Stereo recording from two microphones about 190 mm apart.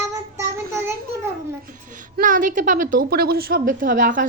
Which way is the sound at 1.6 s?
45° right (ahead or behind).